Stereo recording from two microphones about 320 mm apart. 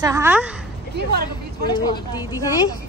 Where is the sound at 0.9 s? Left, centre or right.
Right.